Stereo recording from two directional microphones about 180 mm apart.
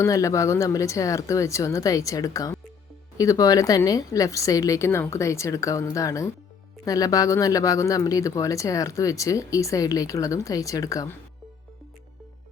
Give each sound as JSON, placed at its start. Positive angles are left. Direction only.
{"t": 0.0, "sound": "a woman's voice", "side_deg": 15}